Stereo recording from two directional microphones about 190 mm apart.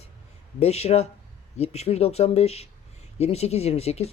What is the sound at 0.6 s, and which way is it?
Speech, 35° left (ahead or behind).